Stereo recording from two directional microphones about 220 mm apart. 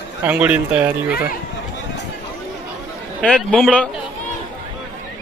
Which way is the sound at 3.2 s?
5° left (ahead or behind).